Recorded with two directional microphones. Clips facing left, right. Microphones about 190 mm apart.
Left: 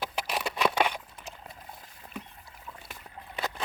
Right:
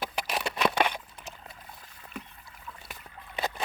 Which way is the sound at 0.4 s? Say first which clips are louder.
Even; 5° left (ahead or behind).